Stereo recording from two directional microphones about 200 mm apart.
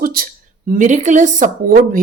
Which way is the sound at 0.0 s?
45° right (ahead or behind).